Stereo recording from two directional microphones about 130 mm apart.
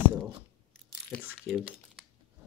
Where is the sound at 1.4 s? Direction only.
Centre (ahead or behind).